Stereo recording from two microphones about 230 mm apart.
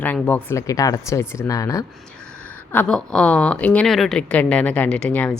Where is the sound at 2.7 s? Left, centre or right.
Centre.